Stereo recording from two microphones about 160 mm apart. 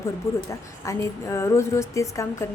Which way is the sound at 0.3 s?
15° left (ahead or behind).